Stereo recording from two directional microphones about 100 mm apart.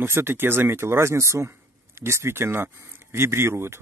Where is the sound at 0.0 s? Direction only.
25° right (ahead or behind).